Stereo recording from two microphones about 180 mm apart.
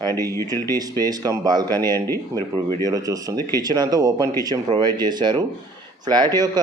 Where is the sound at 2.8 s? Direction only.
20° right (ahead or behind).